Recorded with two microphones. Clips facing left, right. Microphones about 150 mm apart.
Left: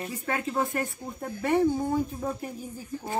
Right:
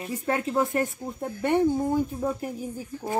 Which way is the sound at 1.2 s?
Centre (ahead or behind).